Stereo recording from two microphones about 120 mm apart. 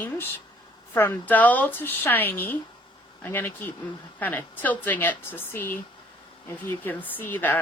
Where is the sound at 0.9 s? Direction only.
15° left (ahead or behind).